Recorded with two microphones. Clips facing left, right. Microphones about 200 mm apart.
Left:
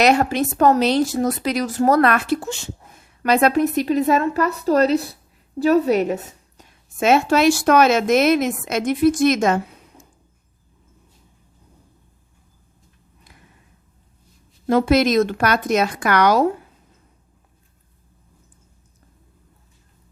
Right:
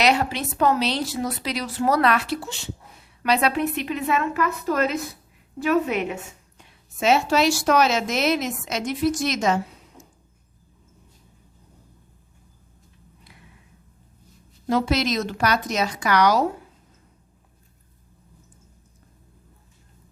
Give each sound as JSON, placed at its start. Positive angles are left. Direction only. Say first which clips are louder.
{"t": 0.0, "sound": "speech", "louder": "left 5 dB", "side_deg": 45}
{"t": 14.7, "sound": "speech", "louder": "left 6 dB", "side_deg": 55}